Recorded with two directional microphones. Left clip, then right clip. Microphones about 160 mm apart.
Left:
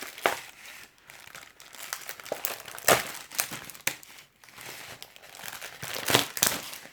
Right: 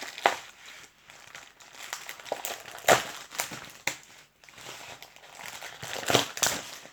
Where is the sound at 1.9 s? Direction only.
15° left (ahead or behind).